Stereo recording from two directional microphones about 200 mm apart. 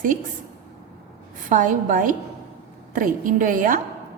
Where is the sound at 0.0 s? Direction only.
40° right (ahead or behind).